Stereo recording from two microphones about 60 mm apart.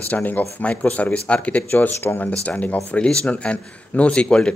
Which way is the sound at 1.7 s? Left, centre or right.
Left.